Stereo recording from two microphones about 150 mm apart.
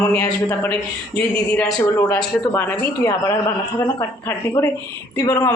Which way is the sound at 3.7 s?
30° left (ahead or behind).